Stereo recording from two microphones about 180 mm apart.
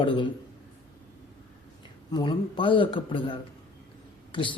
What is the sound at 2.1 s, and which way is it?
Speech, 25° left (ahead or behind).